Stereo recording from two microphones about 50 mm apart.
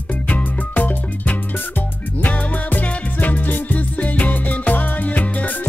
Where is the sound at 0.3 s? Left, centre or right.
Left.